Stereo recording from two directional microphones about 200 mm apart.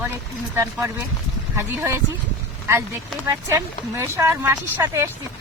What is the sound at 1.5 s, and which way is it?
Speech, 10° right (ahead or behind).